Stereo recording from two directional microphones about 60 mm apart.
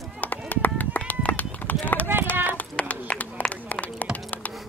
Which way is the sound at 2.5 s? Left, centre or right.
Left.